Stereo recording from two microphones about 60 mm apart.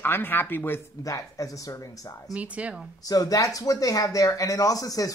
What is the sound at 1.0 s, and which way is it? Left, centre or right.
Speech, left.